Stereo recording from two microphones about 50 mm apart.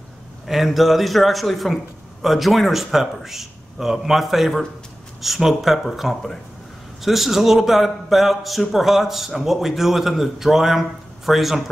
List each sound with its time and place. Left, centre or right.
0.5 s a man's voice: centre